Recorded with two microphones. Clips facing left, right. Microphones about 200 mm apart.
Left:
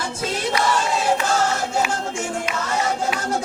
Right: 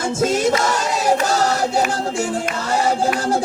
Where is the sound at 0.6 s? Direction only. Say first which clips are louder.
Right 1 dB; 40° right (ahead or behind).